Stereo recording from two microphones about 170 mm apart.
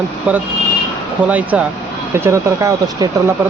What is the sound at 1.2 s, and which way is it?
Speech, 10° right (ahead or behind).